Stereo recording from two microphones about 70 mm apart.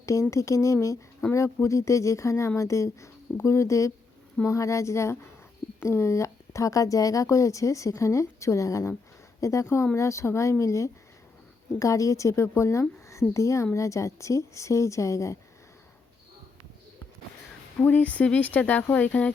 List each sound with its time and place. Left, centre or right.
0.0 s speech: left
17.7 s speech: left